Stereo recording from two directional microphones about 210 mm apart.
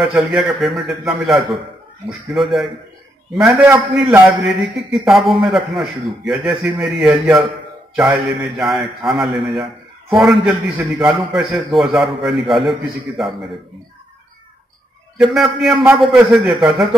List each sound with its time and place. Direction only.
0.0 s a man's voice: 5° right (ahead or behind)
15.1 s a man's voice: centre (ahead or behind)